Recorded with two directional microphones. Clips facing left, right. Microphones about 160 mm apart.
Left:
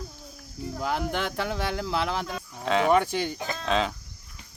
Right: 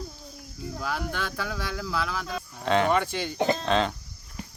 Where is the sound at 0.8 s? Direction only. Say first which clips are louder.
Left 3 dB; 20° left (ahead or behind).